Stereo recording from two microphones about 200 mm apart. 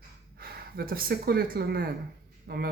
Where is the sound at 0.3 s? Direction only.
50° right (ahead or behind).